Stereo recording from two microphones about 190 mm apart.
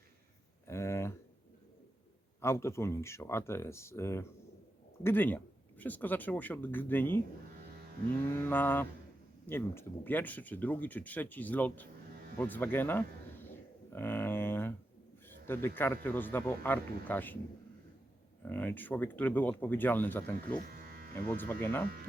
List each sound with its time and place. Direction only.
0.7 s a sound: 15° left (ahead or behind)
2.4 s speech: 15° left (ahead or behind)
8.2 s speech: 10° left (ahead or behind)
13.9 s a sound: 10° left (ahead or behind)
15.4 s speech: 10° left (ahead or behind)
18.4 s speech: 10° left (ahead or behind)
20.7 s electric shaver: 50° right (ahead or behind)
21.2 s speech: 10° left (ahead or behind)